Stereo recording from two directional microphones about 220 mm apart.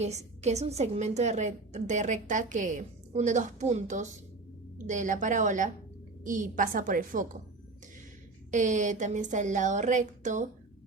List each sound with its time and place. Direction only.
0.0 s a woman's voice: 30° right (ahead or behind)
8.4 s a woman's voice: 35° right (ahead or behind)